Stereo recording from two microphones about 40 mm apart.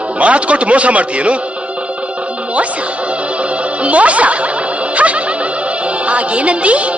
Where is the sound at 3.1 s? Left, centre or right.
Right.